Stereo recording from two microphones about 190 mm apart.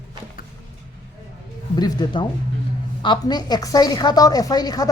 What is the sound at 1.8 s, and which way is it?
A woman's voice, 25° left (ahead or behind).